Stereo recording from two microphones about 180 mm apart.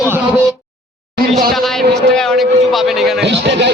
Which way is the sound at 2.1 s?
5° left (ahead or behind).